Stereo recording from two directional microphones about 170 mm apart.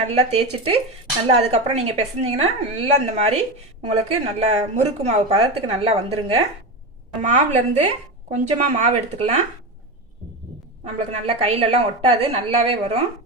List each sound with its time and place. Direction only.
0.1 s a woman's voice: 40° right (ahead or behind)
10.8 s a woman's voice: 40° right (ahead or behind)